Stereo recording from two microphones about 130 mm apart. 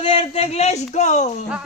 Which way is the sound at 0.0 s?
50° left (ahead or behind).